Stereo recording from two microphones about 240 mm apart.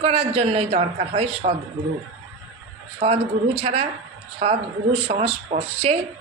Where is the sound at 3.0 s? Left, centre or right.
Right.